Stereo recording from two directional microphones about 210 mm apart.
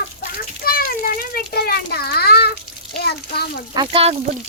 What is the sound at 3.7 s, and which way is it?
Speech, 25° right (ahead or behind).